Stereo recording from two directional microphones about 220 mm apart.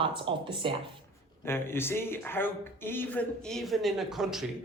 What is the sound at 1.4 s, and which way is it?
Speech, 10° left (ahead or behind).